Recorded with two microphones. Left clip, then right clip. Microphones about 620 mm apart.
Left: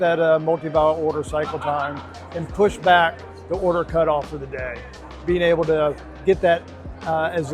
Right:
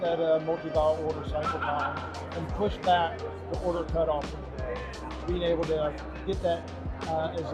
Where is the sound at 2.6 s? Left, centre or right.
Left.